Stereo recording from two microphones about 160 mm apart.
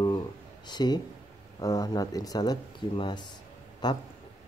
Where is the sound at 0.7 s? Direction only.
25° left (ahead or behind).